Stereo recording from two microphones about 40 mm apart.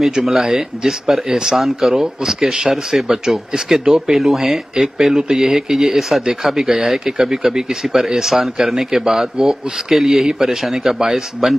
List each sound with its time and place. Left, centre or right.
0.0 s speech: centre